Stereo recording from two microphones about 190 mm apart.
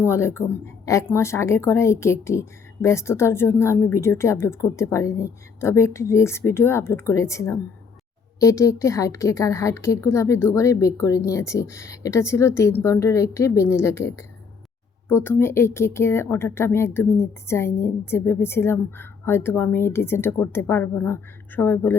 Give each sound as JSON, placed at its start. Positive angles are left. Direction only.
{"t": 0.1, "sound": "a woman's voice", "side_deg": 15}